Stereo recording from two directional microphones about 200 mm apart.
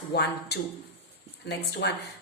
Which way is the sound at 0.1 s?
55° left (ahead or behind).